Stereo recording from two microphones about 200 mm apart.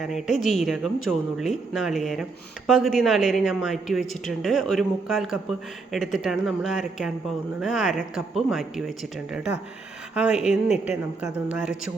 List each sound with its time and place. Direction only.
0.0 s a woman's voice: centre (ahead or behind)